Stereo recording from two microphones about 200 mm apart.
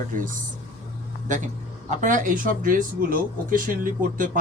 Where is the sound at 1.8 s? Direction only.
40° right (ahead or behind).